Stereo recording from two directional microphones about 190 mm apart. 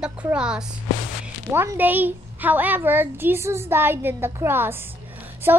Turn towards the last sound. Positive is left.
turn(degrees=-10)  # may be behind; listen again after turning